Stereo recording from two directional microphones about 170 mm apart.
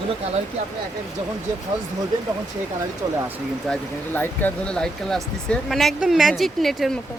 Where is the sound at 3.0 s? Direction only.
20° right (ahead or behind).